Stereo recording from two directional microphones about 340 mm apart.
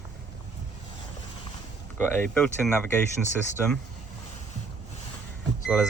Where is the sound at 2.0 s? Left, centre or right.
Centre.